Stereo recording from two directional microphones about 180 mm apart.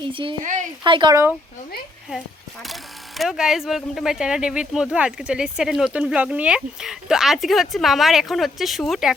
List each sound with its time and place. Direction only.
0.0 s speech: 30° right (ahead or behind)
0.4 s speech: 45° right (ahead or behind)
0.9 s speech: 25° right (ahead or behind)
3.2 s speech: 5° right (ahead or behind)